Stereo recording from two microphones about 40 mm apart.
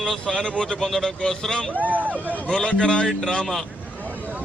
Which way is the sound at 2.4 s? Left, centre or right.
Left.